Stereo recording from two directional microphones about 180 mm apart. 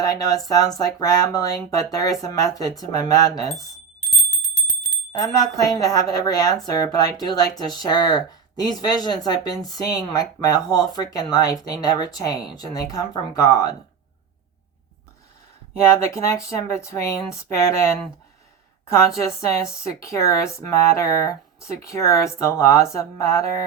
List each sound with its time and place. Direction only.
0.0 s a woman's voice: 20° left (ahead or behind)
4.0 s bell: 40° left (ahead or behind)
5.1 s a woman's voice: 20° left (ahead or behind)
16.1 s speech: 15° left (ahead or behind)